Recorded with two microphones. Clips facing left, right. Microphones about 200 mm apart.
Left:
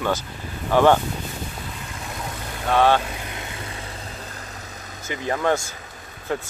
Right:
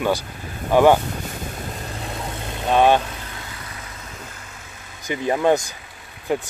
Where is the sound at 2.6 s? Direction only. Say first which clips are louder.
Right 2 dB; 20° right (ahead or behind).